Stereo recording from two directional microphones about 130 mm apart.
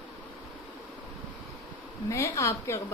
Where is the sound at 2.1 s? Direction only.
20° left (ahead or behind).